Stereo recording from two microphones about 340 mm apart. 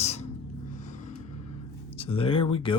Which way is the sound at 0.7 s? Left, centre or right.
Left.